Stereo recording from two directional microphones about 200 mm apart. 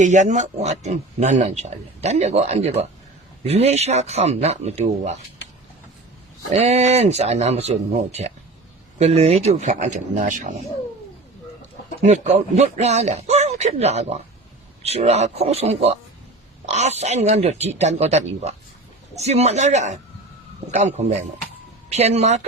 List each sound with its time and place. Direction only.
0.0 s speech: 35° right (ahead or behind)
6.5 s speech: 35° right (ahead or behind)
12.0 s speech: 35° right (ahead or behind)